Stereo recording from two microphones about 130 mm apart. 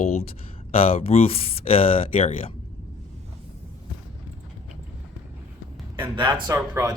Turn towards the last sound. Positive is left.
turn(degrees=-20)  # may be behind; listen again after turning